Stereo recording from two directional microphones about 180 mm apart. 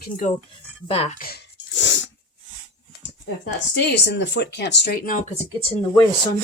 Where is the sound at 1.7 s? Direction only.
90° left.